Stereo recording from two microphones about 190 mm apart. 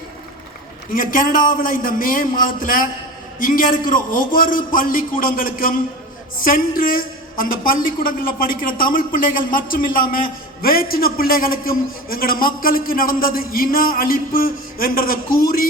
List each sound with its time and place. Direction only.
0.9 s a man's voice: 45° left (ahead or behind)